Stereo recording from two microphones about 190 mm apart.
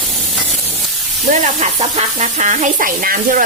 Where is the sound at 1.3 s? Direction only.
40° right (ahead or behind).